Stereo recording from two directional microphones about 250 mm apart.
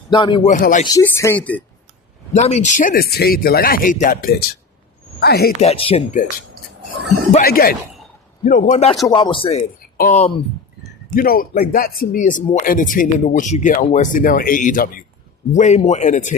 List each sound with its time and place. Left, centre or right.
0.1 s speech: centre
0.4 s speech: left
0.9 s speech: centre
2.3 s speech: left
5.5 s speech: left
7.3 s speech: left